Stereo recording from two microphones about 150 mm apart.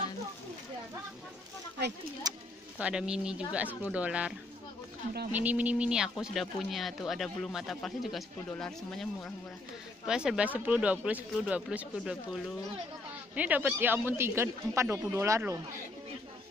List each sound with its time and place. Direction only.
2.3 s bird: 25° right (ahead or behind)
2.8 s speech: 5° right (ahead or behind)
5.3 s speech: 10° right (ahead or behind)